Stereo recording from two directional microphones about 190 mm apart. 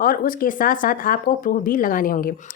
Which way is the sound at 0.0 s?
50° left (ahead or behind).